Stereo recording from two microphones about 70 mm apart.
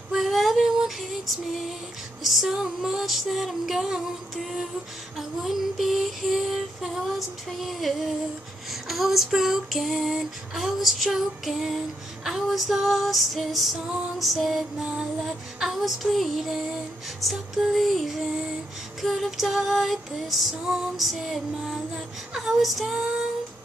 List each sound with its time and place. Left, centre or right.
0.1 s female singing: centre